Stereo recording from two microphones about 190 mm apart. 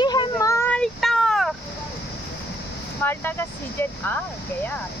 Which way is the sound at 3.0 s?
10° left (ahead or behind).